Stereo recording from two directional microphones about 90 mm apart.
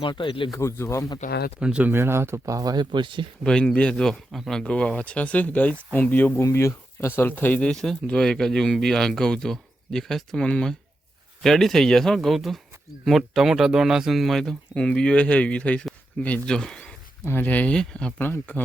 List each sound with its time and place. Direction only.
0.0 s speech: 65° left (ahead or behind)
0.5 s speech: 35° left (ahead or behind)
1.5 s speech: 10° right (ahead or behind)
1.9 s speech: 25° right (ahead or behind); by 3.2 s 60° right (ahead or behind)
3.4 s speech: 10° left (ahead or behind)
6.4 s speech: 30° left (ahead or behind); by 16.9 s 10° left (ahead or behind)
17.2 s speech: 20° left (ahead or behind)
18.2 s speech: 20° left (ahead or behind)